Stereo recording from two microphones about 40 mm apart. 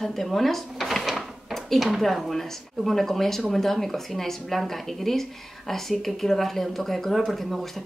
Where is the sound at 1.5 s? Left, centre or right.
Centre.